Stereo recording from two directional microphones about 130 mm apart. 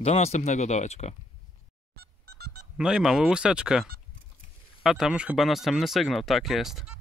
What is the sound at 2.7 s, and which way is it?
Speech, 5° right (ahead or behind).